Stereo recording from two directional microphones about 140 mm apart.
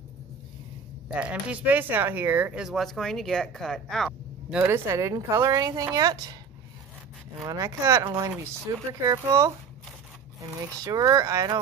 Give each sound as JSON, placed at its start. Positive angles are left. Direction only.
{"t": 1.1, "sound": "speech", "side_deg": -10}
{"t": 4.6, "sound": "speech", "side_deg": -20}
{"t": 7.4, "sound": "speech", "side_deg": -25}
{"t": 10.4, "sound": "speech", "side_deg": -25}